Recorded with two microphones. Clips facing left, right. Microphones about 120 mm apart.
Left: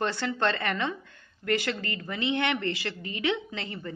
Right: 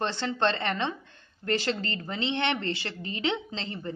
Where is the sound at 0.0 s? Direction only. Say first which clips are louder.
Even; 25° right (ahead or behind).